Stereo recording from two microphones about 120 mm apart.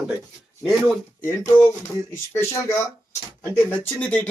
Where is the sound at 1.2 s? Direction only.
20° left (ahead or behind).